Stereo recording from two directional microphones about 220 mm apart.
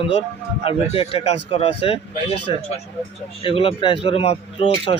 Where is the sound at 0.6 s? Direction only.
25° left (ahead or behind).